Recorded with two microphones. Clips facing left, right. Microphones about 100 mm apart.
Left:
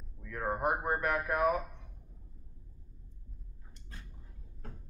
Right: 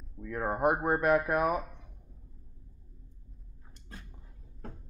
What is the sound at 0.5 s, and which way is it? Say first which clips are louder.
Speech: right 4 dB; 15° right (ahead or behind).